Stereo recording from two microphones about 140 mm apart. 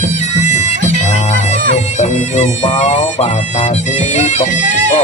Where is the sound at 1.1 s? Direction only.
55° left (ahead or behind).